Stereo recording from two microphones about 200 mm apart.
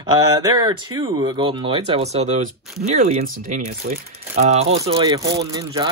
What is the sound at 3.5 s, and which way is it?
Speech, 40° right (ahead or behind).